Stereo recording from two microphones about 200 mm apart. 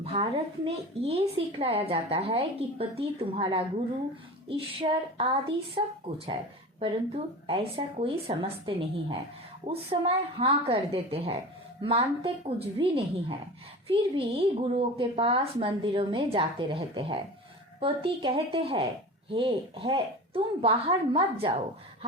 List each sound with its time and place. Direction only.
0.0 s a woman's voice: 30° right (ahead or behind)